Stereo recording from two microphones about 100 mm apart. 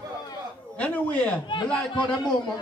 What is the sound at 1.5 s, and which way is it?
Speech, 55° left (ahead or behind).